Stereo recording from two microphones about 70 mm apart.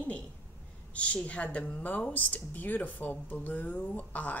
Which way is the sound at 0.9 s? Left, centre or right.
Centre.